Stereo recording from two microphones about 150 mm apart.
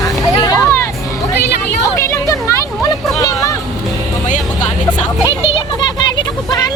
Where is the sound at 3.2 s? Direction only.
25° left (ahead or behind).